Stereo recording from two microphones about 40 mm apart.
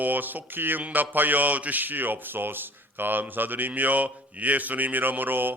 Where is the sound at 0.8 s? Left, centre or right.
Right.